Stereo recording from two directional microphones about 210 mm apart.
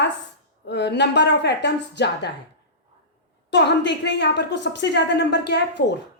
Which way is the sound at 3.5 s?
55° left (ahead or behind).